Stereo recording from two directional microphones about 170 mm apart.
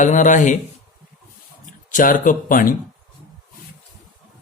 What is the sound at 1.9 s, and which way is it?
Speech, 50° left (ahead or behind).